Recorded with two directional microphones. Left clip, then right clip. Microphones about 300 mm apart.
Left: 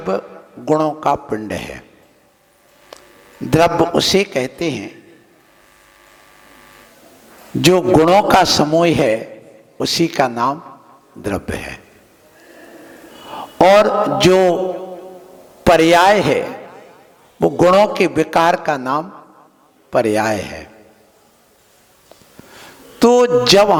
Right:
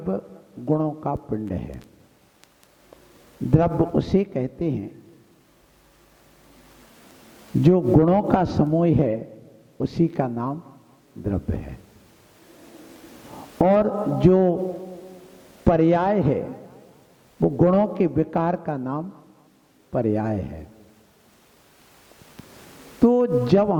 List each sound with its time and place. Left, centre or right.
0.0 s a man's voice: centre
3.5 s a man's voice: centre
7.9 s a man's voice: centre
13.3 s a man's voice: centre
14.6 s a sound: left
15.6 s a man's voice: centre
23.0 s a man's voice: centre